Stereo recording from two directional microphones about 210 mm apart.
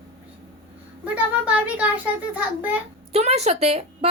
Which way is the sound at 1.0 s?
5° right (ahead or behind).